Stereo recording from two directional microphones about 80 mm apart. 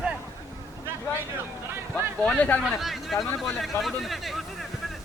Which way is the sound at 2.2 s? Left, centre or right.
Centre.